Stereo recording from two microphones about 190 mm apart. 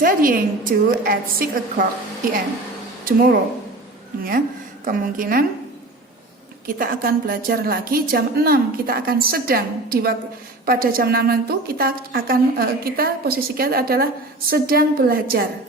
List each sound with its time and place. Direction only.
0.0 s a woman's voice: 45° right (ahead or behind)
3.0 s a woman's voice: 50° right (ahead or behind)
6.7 s a woman's voice: 50° right (ahead or behind)